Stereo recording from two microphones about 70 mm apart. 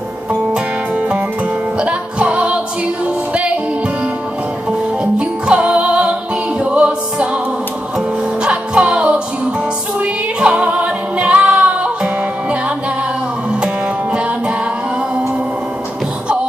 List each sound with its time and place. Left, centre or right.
0.9 s music: centre
5.0 s music: centre
8.5 s music: centre